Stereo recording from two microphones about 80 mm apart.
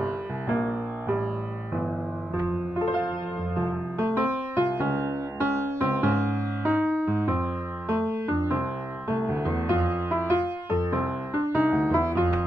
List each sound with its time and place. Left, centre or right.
0.7 s music: right
4.1 s music: right